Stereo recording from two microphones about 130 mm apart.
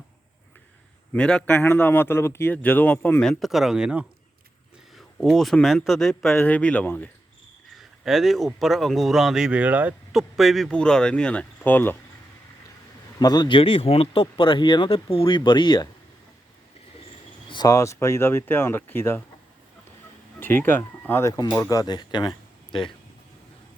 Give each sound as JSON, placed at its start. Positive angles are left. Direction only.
{"t": 1.1, "sound": "speech", "side_deg": 5}
{"t": 4.9, "sound": "a sound", "side_deg": 0}
{"t": 5.6, "sound": "speech", "side_deg": 0}
{"t": 7.8, "sound": "a sound", "side_deg": 0}
{"t": 8.5, "sound": "speech", "side_deg": 0}
{"t": 10.2, "sound": "speech", "side_deg": 0}
{"t": 13.1, "sound": "speech", "side_deg": 30}
{"t": 13.6, "sound": "speech", "side_deg": 45}
{"t": 17.5, "sound": "speech", "side_deg": 30}
{"t": 20.4, "sound": "speech", "side_deg": 15}